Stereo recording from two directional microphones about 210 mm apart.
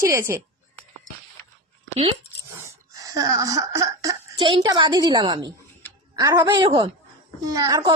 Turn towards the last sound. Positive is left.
turn(degrees=-20)  # may be behind; listen again after turning